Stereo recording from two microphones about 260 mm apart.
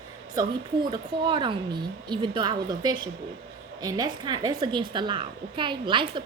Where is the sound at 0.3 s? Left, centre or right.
Centre.